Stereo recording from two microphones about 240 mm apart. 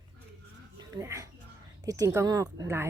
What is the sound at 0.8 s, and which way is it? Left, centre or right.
Speech, centre.